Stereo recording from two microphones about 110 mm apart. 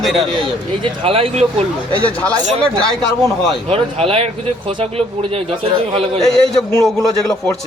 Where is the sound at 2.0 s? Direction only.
10° left (ahead or behind).